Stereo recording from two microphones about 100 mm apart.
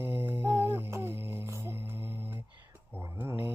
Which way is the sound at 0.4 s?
25° right (ahead or behind).